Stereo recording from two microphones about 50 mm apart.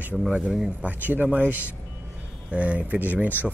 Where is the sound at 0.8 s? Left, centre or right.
Right.